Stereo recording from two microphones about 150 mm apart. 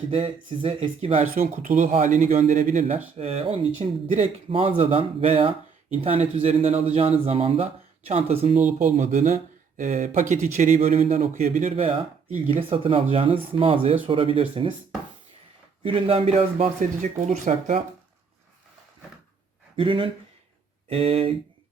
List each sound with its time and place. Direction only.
0.1 s speech: 35° right (ahead or behind)
1.6 s a man's voice: 55° right (ahead or behind)
3.2 s speech: 45° right (ahead or behind)
4.5 s speech: 40° right (ahead or behind); by 11.7 s 55° right (ahead or behind)
11.7 s speech: 40° right (ahead or behind)
15.8 s speech: 35° right (ahead or behind)
19.7 s speech: 35° right (ahead or behind)